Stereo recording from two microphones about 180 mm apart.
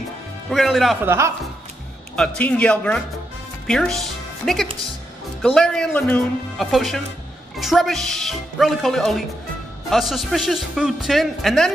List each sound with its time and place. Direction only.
0.5 s speech: centre (ahead or behind)
1.0 s speech: 15° right (ahead or behind)
2.1 s a man's voice: 5° left (ahead or behind)